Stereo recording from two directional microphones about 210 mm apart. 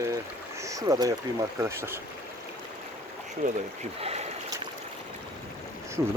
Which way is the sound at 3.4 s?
35° right (ahead or behind).